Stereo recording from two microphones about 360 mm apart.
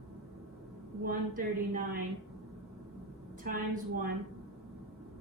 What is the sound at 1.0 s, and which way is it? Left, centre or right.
Speech, right.